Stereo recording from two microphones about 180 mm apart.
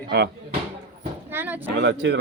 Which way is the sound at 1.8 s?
75° right (ahead or behind).